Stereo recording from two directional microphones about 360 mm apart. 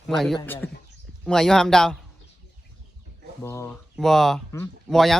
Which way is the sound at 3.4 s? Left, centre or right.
Centre.